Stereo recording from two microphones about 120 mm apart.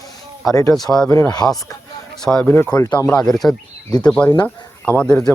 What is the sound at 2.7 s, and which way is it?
Speech, 30° left (ahead or behind).